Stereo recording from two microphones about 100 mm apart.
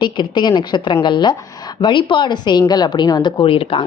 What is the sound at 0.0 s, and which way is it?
A woman's voice, 50° left (ahead or behind).